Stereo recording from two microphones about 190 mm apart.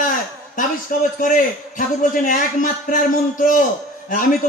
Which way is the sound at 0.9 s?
45° left (ahead or behind).